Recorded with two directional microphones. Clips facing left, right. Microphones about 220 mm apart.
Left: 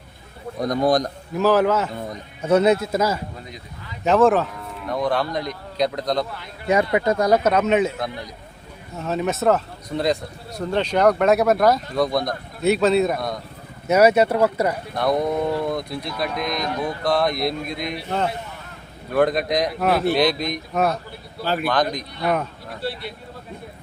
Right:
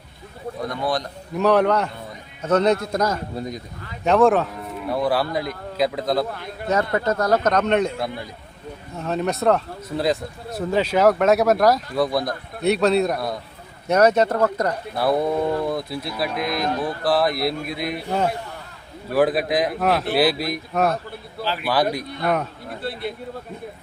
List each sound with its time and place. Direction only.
0.6 s speech: 40° left (ahead or behind)
1.4 s speech: centre (ahead or behind)
3.3 s speech: 40° right (ahead or behind)
4.0 s speech: centre (ahead or behind)
6.9 s speech: 15° left (ahead or behind)
14.9 s speech: 5° right (ahead or behind)
19.1 s speech: 5° right (ahead or behind)
22.9 s speech: 55° right (ahead or behind)